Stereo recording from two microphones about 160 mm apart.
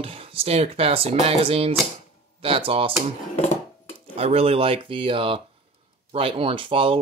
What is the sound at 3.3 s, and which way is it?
Dishes, 45° left (ahead or behind).